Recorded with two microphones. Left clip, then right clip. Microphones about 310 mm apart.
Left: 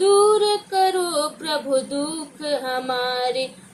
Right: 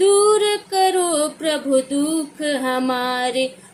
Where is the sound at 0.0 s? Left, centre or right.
Centre.